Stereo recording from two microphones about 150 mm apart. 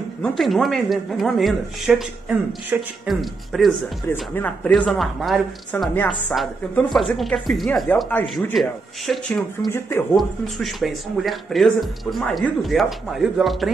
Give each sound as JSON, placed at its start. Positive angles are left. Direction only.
{"t": 0.2, "sound": "speech", "side_deg": 0}
{"t": 4.1, "sound": "speech", "side_deg": 15}
{"t": 5.9, "sound": "speech", "side_deg": 10}
{"t": 8.5, "sound": "speech", "side_deg": 0}
{"t": 9.7, "sound": "speech", "side_deg": 15}
{"t": 10.1, "sound": "speech", "side_deg": 0}